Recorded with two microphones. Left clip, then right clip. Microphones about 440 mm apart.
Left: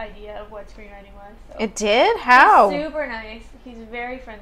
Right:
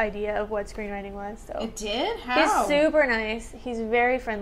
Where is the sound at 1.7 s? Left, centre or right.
Left.